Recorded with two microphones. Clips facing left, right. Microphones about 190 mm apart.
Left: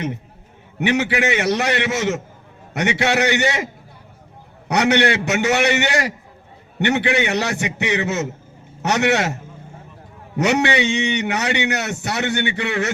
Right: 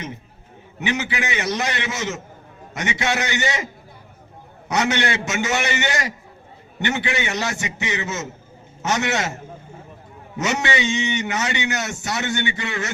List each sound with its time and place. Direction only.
0.8 s a man's voice: 65° left (ahead or behind)
4.7 s a man's voice: 65° left (ahead or behind)
10.3 s a man's voice: 60° left (ahead or behind)